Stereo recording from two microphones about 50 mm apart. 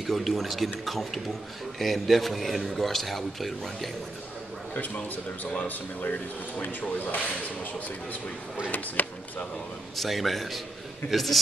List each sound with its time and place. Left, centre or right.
0.0 s a man's voice: centre
4.7 s speech: left
8.6 s speech: left
9.9 s a man's voice: centre